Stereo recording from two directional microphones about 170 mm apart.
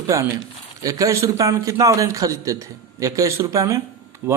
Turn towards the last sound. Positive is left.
turn(degrees=-15)  # may be behind; listen again after turning